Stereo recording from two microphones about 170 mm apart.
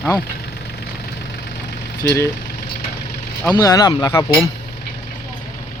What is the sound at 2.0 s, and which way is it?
Speech, 15° left (ahead or behind).